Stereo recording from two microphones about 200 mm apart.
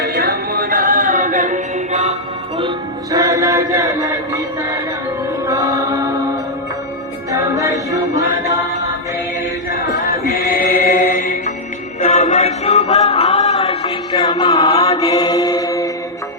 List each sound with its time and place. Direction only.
0.1 s music: 50° right (ahead or behind); by 2.1 s 35° right (ahead or behind)
2.6 s chant: 20° right (ahead or behind)
5.5 s music: 15° right (ahead or behind)
7.3 s music: 15° right (ahead or behind)
9.9 s music: 45° left (ahead or behind); by 14.8 s 20° left (ahead or behind)
14.9 s mantra: 15° left (ahead or behind)